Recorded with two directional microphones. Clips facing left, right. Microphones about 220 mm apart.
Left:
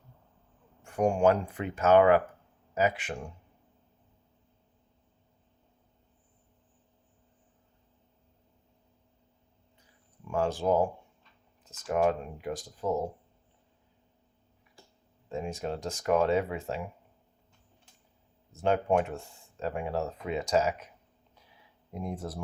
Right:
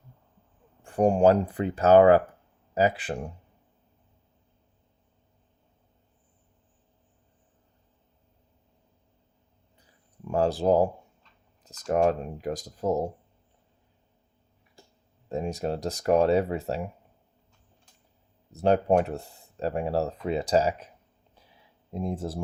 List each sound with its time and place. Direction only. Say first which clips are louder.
0.8 s speech: right 4 dB; 35° right (ahead or behind)
10.2 s speech: right 5 dB; 35° right (ahead or behind)
15.3 s speech: right 5 dB; 40° right (ahead or behind)
18.5 s speech: right 4 dB; 40° right (ahead or behind)
21.9 s speech: right 5 dB; 30° right (ahead or behind)